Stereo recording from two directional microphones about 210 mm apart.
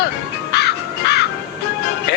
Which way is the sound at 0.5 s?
50° left (ahead or behind).